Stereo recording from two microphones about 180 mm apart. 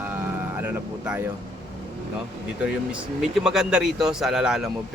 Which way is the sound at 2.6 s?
Centre (ahead or behind).